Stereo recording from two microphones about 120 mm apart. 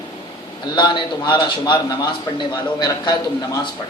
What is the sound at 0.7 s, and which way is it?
A man's voice, 40° left (ahead or behind).